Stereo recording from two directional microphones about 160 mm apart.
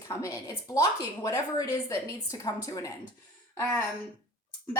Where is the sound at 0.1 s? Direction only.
20° left (ahead or behind).